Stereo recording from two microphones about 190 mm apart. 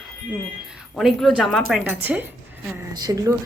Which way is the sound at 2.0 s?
10° right (ahead or behind).